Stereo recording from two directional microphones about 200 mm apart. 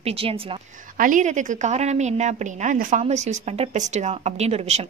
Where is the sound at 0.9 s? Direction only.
40° right (ahead or behind).